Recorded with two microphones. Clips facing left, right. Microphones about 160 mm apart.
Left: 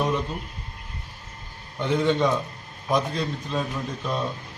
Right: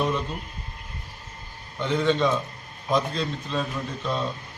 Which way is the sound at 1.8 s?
15° left (ahead or behind).